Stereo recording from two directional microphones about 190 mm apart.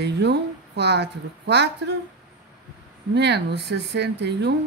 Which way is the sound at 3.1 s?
65° right (ahead or behind).